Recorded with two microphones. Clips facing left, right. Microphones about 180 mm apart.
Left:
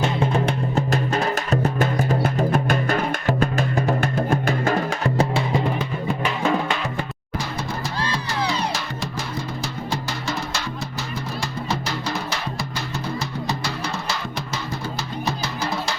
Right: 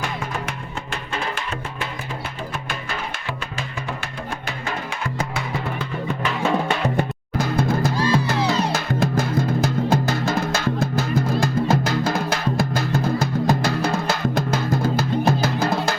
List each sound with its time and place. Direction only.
0.0 s music: 30° left (ahead or behind)
6.9 s music: 55° right (ahead or behind)